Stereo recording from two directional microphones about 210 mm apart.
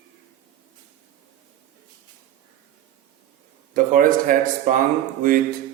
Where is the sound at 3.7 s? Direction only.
40° right (ahead or behind).